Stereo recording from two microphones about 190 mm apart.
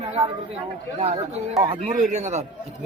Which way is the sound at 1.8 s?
40° right (ahead or behind).